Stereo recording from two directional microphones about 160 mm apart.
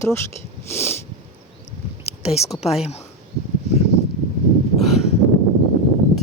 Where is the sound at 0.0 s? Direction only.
15° left (ahead or behind).